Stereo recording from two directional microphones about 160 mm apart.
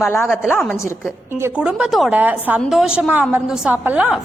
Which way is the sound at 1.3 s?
15° right (ahead or behind).